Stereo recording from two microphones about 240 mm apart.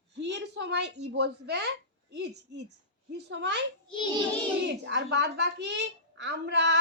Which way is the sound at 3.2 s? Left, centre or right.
Right.